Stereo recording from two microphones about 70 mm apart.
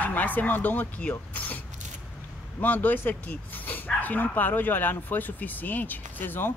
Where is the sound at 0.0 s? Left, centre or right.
Left.